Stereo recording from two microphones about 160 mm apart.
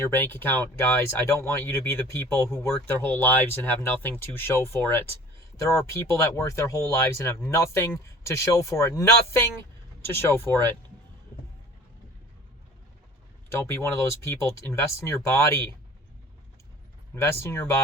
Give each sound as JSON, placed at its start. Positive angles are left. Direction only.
{"t": 0.0, "sound": "speech", "side_deg": 15}
{"t": 13.5, "sound": "speech", "side_deg": 15}
{"t": 17.4, "sound": "speech", "side_deg": 15}